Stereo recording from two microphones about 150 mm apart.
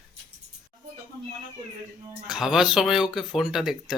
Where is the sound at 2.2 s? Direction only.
5° right (ahead or behind).